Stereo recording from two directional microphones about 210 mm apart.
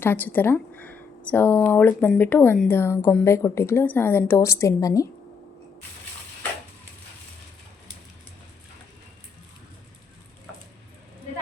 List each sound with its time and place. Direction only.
0.0 s speech: 10° left (ahead or behind)